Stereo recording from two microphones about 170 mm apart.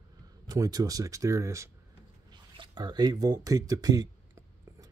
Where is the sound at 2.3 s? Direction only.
25° right (ahead or behind).